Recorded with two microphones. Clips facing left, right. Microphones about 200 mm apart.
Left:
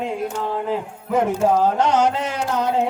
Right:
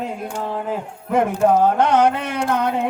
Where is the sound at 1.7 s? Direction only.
55° right (ahead or behind).